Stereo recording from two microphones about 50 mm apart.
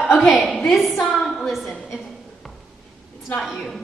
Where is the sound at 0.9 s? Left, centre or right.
Centre.